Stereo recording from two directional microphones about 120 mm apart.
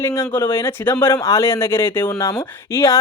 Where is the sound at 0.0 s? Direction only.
20° left (ahead or behind).